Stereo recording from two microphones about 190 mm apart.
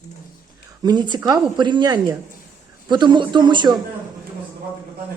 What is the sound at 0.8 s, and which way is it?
Speech, 20° right (ahead or behind).